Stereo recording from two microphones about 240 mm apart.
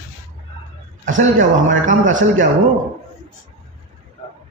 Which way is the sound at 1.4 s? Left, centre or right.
Right.